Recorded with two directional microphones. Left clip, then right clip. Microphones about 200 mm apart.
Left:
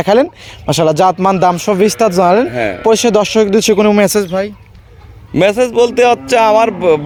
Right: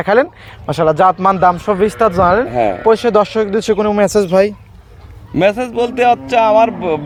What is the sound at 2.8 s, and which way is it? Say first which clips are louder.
Speech: left 2 dB; 60° left (ahead or behind).